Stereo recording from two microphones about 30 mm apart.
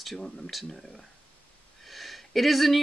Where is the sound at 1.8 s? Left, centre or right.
Centre.